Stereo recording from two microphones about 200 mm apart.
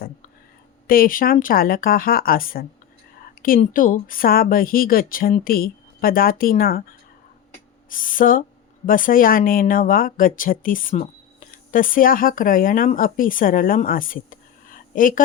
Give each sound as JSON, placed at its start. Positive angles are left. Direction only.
{"t": 0.9, "sound": "speech", "side_deg": 45}
{"t": 7.9, "sound": "speech", "side_deg": 45}